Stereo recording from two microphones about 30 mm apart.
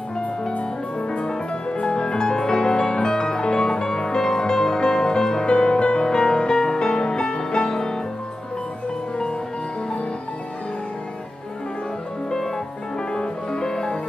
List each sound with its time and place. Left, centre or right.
1.2 s music: left
5.5 s music: left
13.1 s music: left